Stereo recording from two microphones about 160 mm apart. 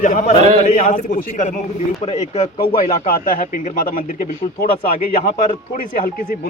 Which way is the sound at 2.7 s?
60° left (ahead or behind).